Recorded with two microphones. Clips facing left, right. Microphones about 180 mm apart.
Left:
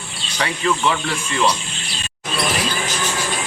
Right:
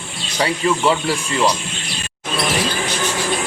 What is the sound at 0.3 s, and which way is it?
Speech, 30° right (ahead or behind).